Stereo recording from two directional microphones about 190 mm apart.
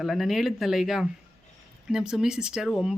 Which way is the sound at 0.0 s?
Centre (ahead or behind).